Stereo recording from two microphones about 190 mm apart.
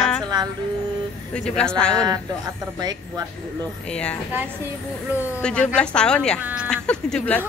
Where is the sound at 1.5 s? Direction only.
5° left (ahead or behind).